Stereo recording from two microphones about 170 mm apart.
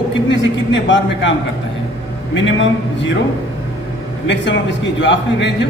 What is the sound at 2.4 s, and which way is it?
Speech, 90° left.